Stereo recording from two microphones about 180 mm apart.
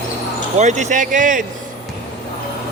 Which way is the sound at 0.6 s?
40° right (ahead or behind).